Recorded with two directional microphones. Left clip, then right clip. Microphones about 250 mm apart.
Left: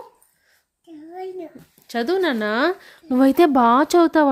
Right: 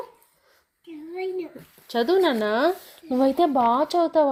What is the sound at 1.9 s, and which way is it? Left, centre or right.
Speech, left.